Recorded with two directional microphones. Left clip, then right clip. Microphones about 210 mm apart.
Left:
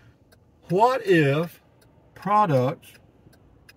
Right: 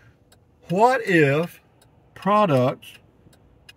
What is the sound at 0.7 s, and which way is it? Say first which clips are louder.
Speech: right 1 dB; 20° right (ahead or behind).